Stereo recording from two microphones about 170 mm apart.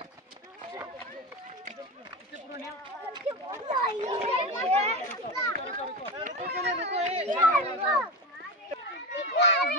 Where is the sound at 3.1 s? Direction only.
20° right (ahead or behind).